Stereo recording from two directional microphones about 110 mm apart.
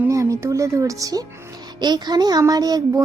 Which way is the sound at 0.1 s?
30° right (ahead or behind).